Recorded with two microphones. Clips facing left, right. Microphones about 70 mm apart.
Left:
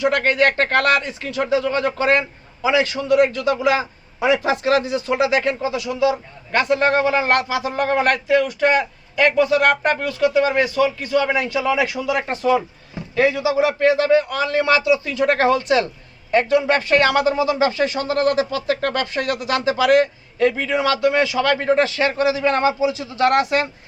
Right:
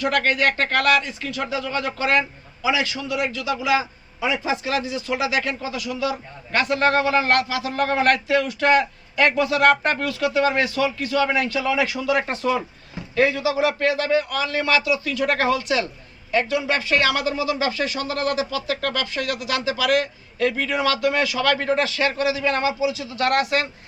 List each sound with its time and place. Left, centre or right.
0.0 s a man's voice: left
4.3 s speech: left
5.1 s a man's voice: left; by 12.6 s centre
13.1 s a man's voice: centre; by 20.1 s left
20.6 s a man's voice: centre